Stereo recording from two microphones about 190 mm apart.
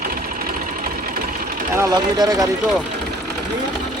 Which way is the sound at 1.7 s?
20° right (ahead or behind).